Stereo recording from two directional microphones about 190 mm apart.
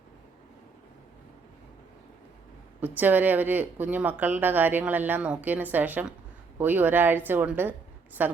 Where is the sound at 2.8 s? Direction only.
10° right (ahead or behind).